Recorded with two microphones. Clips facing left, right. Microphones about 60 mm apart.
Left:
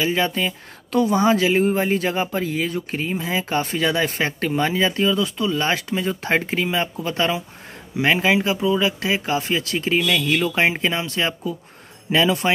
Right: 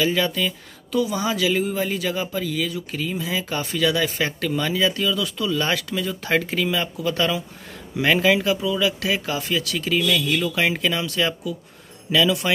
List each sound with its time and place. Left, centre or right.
0.0 s speech: left
0.9 s speech: left